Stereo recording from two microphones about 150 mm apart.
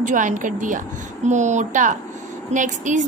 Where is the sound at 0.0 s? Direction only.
55° right (ahead or behind).